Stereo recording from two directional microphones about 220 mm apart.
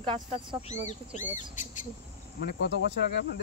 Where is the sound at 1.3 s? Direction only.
35° left (ahead or behind).